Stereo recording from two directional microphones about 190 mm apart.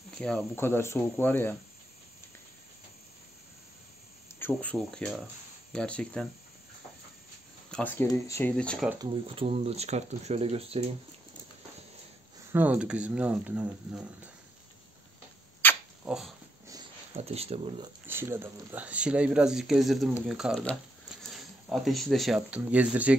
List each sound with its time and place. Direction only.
0.2 s speech: 5° left (ahead or behind)
4.4 s speech: 10° left (ahead or behind)
7.7 s speech: 10° left (ahead or behind)
8.9 s speech: 25° right (ahead or behind)
12.5 s speech: 5° right (ahead or behind)
15.6 s dog: 10° left (ahead or behind)
16.1 s speech: centre (ahead or behind)
17.1 s speech: 30° right (ahead or behind)
18.0 s speech: 10° right (ahead or behind)